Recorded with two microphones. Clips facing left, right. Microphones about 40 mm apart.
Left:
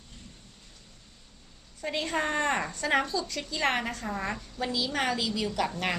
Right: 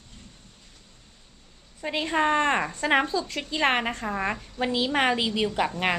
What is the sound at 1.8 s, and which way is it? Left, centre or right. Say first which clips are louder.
A woman's voice: right 5 dB; right.